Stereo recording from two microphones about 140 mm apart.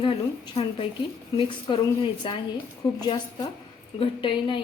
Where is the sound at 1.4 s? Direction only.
40° left (ahead or behind).